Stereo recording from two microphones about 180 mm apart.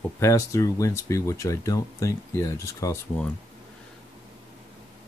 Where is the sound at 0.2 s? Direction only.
15° left (ahead or behind).